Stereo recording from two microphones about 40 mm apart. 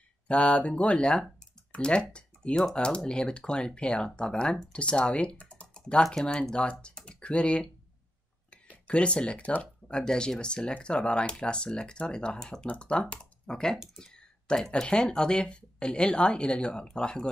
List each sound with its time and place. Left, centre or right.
0.3 s speech: left
8.8 s speech: left